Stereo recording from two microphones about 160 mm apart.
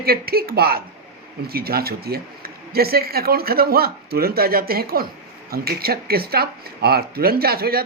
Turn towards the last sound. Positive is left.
turn(degrees=-75)  # may be behind; listen again after turning